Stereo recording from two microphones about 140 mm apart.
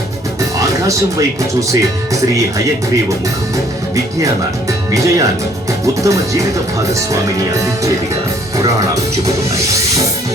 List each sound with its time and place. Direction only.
1.4 s speech: 25° right (ahead or behind)
4.9 s speech: 25° right (ahead or behind)